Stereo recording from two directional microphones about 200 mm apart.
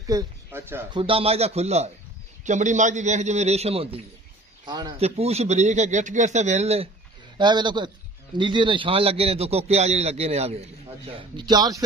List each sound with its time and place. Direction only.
0.0 s speech: 15° right (ahead or behind)
0.9 s a man's voice: 25° right (ahead or behind)
11.3 s speech: 20° right (ahead or behind)